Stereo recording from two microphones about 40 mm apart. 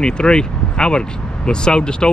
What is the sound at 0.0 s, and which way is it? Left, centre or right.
Speech, left.